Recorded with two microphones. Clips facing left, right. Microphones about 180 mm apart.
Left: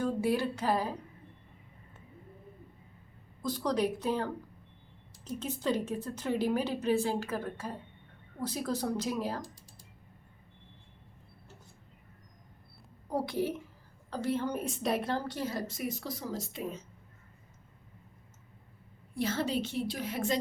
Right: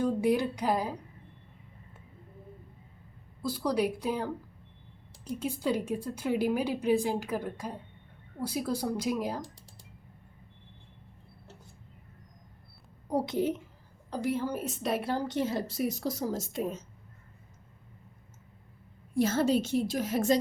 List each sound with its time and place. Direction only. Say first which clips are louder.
0.0 s a woman's voice: right 3 dB; 15° right (ahead or behind)
3.4 s a woman's voice: right 1 dB; 10° right (ahead or behind)
5.4 s a woman's voice: right 1 dB; 10° right (ahead or behind)
13.1 s a woman's voice: right 3 dB; 20° right (ahead or behind); by 16.8 s 45° right (ahead or behind)
19.1 s a woman's voice: right 6 dB; 45° right (ahead or behind)